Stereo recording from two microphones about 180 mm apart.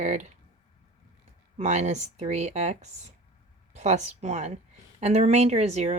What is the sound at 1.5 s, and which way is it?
A woman's voice, 40° right (ahead or behind).